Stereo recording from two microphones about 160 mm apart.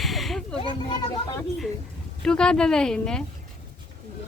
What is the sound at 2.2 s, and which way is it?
Speech, 5° left (ahead or behind).